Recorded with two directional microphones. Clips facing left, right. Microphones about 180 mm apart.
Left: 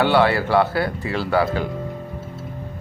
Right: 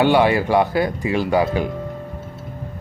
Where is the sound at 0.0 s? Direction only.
15° right (ahead or behind).